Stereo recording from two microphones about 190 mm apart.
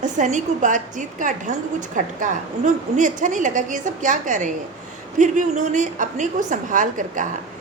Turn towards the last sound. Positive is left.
turn(degrees=-45)  # may be behind; listen again after turning